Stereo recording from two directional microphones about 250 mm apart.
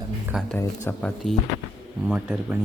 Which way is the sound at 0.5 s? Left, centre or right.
Centre.